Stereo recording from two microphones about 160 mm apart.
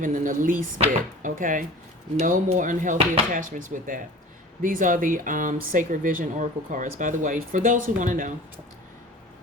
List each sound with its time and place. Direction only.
0.0 s speech: 55° right (ahead or behind)